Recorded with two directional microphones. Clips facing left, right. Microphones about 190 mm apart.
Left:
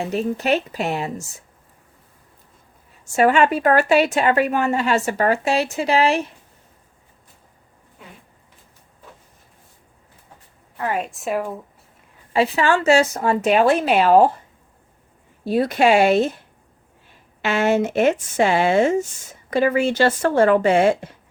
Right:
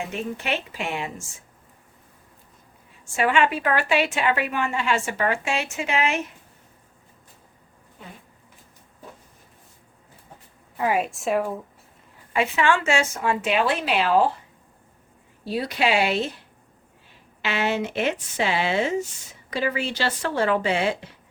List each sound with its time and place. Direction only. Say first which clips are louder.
0.0 s a woman's voice: left 7 dB; 35° left (ahead or behind)
3.2 s a woman's voice: left 5 dB; 40° left (ahead or behind)
10.8 s a woman's voice: right 1 dB; 10° right (ahead or behind)
12.3 s a woman's voice: left 4 dB; 35° left (ahead or behind)
15.4 s speech: left 7 dB; 50° left (ahead or behind)
17.4 s speech: left 6 dB; 45° left (ahead or behind)